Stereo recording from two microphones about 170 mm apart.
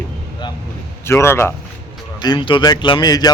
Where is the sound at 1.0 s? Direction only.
15° left (ahead or behind).